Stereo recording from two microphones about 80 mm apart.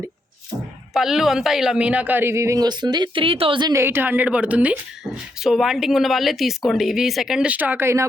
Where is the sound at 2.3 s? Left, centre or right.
Right.